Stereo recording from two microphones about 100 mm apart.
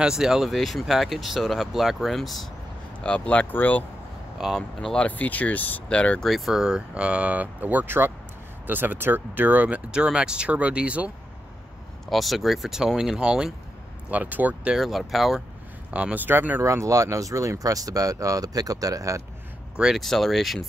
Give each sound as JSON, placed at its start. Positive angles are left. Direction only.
{"t": 0.0, "sound": "speech", "side_deg": -5}
{"t": 3.0, "sound": "speech", "side_deg": 10}
{"t": 4.4, "sound": "speech", "side_deg": 0}
{"t": 12.1, "sound": "speech", "side_deg": 0}
{"t": 14.8, "sound": "speech", "side_deg": 0}
{"t": 15.9, "sound": "speech", "side_deg": -15}
{"t": 16.6, "sound": "speech", "side_deg": -30}
{"t": 19.8, "sound": "speech", "side_deg": 0}